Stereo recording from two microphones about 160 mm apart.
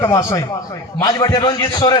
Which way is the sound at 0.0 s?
15° left (ahead or behind).